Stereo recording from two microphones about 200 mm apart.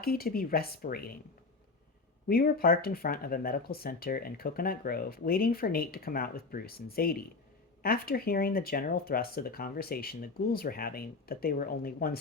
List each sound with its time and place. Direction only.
0.0 s speech: 50° left (ahead or behind)
2.2 s speech: 45° left (ahead or behind)